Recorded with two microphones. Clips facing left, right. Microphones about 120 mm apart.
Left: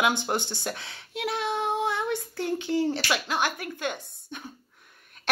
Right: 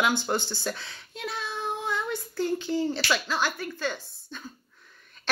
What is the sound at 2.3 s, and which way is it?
Speech, 65° left (ahead or behind).